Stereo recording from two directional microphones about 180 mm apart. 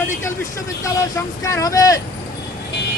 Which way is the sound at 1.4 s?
15° left (ahead or behind).